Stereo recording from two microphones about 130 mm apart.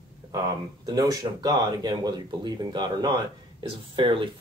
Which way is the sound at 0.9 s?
25° right (ahead or behind).